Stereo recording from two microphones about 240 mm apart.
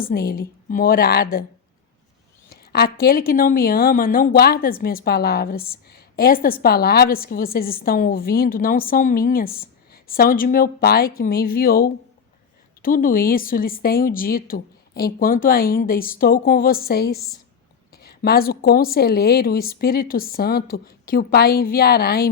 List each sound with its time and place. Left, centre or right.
0.0 s a woman's voice: left
2.5 s a woman's voice: left